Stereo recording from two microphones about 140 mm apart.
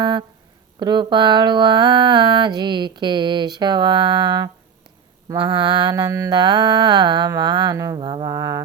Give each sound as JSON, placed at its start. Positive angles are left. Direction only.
{"t": 0.0, "sound": "speech", "side_deg": -35}
{"t": 0.8, "sound": "mantra", "side_deg": -30}